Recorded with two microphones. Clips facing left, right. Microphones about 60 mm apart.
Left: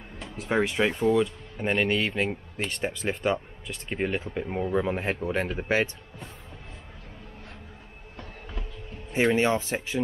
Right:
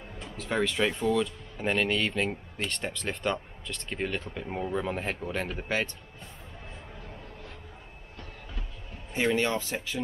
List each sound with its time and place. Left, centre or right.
0.4 s speech: left
4.5 s speech: centre
4.7 s speech: centre
9.1 s speech: left